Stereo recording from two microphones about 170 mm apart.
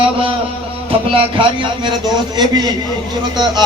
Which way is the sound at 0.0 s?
30° right (ahead or behind).